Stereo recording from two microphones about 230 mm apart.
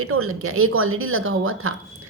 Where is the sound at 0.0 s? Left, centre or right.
Right.